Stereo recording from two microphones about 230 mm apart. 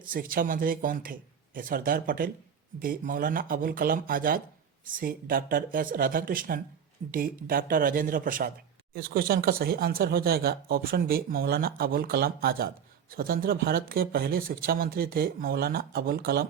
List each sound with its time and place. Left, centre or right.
0.0 s speech: right